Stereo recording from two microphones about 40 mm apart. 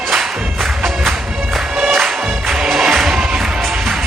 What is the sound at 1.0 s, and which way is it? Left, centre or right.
Music, centre.